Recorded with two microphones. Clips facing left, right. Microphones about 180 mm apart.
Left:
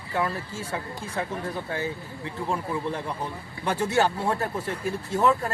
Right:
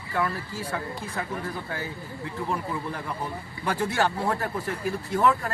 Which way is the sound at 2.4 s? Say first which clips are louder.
Left 3 dB; 25° left (ahead or behind).